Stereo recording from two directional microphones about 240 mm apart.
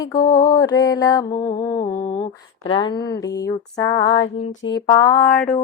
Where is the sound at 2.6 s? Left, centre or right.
Left.